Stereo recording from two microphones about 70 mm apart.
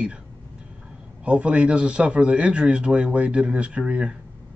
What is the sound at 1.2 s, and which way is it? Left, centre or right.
A man's voice, centre.